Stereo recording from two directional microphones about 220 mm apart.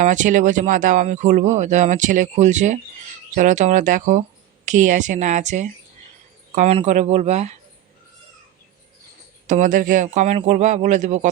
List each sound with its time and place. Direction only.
0.0 s speech: 35° right (ahead or behind)
9.5 s speech: 35° right (ahead or behind)